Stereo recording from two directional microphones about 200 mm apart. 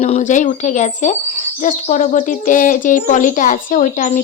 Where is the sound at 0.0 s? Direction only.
35° left (ahead or behind).